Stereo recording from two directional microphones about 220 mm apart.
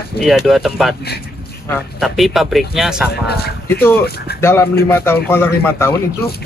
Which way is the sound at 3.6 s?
10° left (ahead or behind).